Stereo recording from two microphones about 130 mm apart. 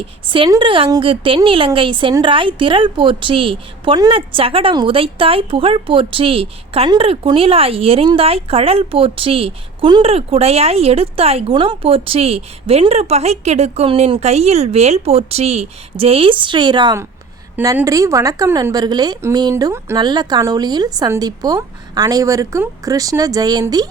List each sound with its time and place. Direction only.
0.3 s a woman's voice: 40° right (ahead or behind)
17.8 s a woman's voice: 25° right (ahead or behind)